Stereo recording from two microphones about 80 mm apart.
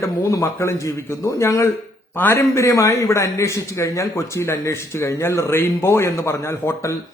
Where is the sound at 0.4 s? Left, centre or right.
Left.